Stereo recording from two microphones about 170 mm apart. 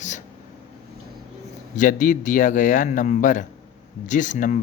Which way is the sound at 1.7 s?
50° left (ahead or behind).